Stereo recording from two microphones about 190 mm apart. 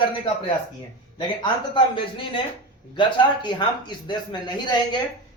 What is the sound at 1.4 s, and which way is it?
Speech, 25° left (ahead or behind).